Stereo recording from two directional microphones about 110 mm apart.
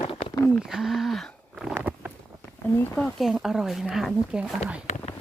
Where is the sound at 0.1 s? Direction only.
55° left (ahead or behind).